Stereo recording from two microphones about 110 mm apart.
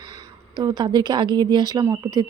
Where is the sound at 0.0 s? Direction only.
45° right (ahead or behind).